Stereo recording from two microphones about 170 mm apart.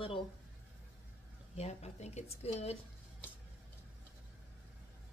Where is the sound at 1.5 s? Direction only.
40° left (ahead or behind).